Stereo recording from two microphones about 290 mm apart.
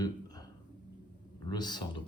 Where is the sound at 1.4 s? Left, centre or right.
Centre.